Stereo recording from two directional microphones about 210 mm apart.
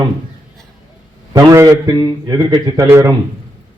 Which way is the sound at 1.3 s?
15° right (ahead or behind).